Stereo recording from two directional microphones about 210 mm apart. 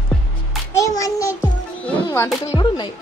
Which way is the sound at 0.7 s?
15° left (ahead or behind).